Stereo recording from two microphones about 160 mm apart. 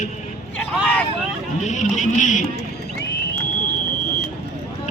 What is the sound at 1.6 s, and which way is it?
Music, 50° left (ahead or behind).